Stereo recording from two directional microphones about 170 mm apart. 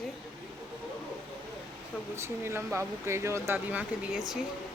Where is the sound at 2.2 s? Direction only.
15° right (ahead or behind).